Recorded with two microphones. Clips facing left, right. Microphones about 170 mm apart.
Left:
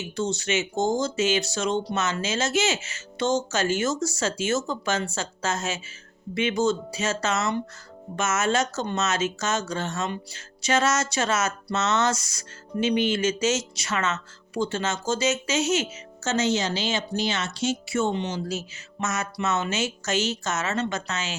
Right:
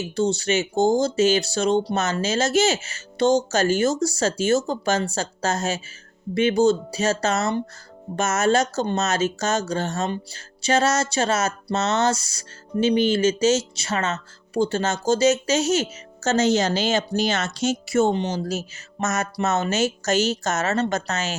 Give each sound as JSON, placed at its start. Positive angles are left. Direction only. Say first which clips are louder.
{"t": 0.0, "sound": "speech", "louder": "right 5 dB", "side_deg": -35}